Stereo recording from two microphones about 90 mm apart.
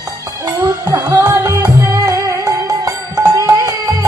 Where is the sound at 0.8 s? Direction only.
45° right (ahead or behind).